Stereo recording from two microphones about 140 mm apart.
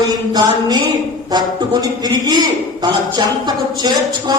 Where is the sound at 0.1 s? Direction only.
30° right (ahead or behind).